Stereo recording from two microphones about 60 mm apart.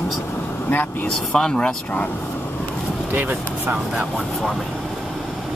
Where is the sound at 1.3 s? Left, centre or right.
Centre.